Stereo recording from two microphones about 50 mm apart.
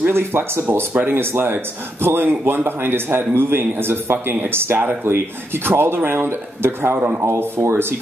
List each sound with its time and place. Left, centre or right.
0.0 s speech: right